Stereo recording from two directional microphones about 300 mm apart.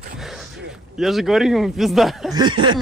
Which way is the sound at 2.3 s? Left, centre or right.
Centre.